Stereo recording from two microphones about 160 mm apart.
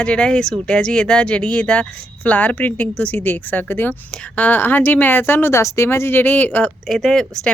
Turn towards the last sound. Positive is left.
turn(degrees=5)  # may be behind; listen again after turning